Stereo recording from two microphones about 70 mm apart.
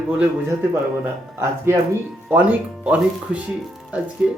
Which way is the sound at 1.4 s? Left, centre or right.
Right.